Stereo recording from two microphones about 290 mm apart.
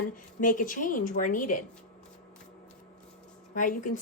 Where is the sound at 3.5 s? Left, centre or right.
Left.